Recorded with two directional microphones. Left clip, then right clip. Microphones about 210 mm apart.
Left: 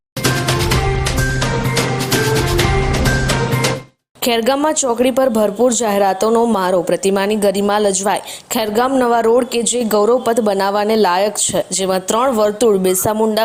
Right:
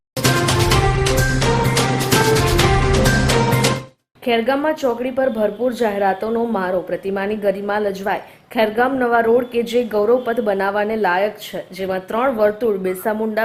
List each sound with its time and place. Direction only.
4.3 s a woman's voice: 30° left (ahead or behind)